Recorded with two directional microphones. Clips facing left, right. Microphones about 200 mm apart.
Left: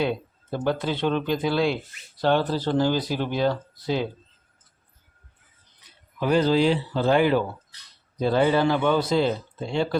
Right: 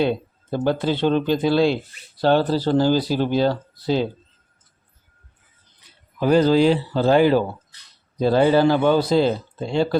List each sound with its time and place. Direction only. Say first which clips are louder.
0.5 s speech: right 4 dB; 30° right (ahead or behind)
6.1 s speech: right 4 dB; 40° right (ahead or behind)